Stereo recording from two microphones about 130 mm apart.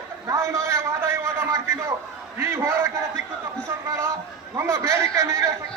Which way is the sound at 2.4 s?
20° right (ahead or behind).